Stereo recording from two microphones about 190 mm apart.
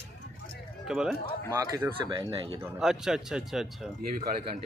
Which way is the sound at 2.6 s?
5° right (ahead or behind).